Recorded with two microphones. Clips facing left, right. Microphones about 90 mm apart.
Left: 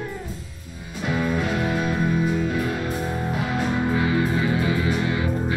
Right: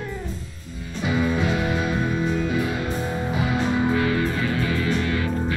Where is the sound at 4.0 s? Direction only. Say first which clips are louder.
Left 1 dB; 15° left (ahead or behind).